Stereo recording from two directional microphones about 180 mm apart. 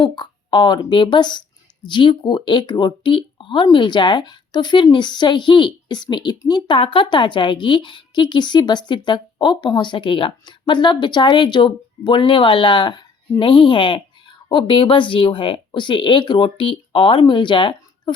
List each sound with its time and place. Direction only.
0.0 s speech: 25° left (ahead or behind)